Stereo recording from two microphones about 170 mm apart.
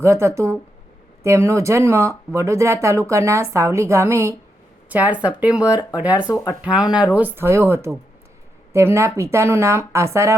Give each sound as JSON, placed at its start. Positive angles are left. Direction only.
{"t": 0.0, "sound": "speech", "side_deg": -15}
{"t": 6.3, "sound": "speech", "side_deg": 20}
{"t": 6.6, "sound": "speech", "side_deg": -5}